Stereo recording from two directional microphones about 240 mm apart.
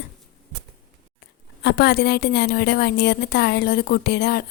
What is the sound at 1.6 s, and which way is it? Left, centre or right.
A woman's voice, left.